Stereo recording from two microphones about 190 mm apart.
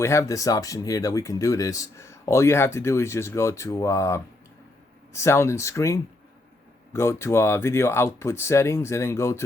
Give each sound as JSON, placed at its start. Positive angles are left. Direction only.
{"t": 0.0, "sound": "speech", "side_deg": 15}